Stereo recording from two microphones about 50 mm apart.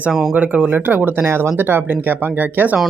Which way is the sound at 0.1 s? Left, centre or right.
Centre.